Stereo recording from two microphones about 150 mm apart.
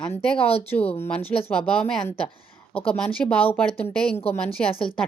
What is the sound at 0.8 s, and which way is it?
Speech, 45° left (ahead or behind).